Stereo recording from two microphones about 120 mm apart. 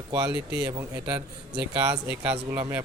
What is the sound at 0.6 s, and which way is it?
Speech, 10° right (ahead or behind).